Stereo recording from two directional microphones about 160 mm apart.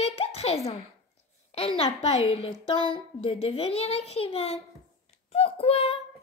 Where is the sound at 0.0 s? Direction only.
40° left (ahead or behind).